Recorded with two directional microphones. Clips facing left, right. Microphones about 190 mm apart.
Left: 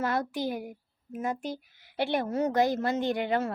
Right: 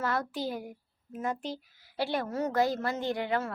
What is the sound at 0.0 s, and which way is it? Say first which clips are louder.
A woman's voice: left 2 dB; 15° left (ahead or behind).